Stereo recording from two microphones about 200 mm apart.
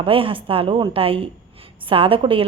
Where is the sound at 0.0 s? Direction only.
25° right (ahead or behind).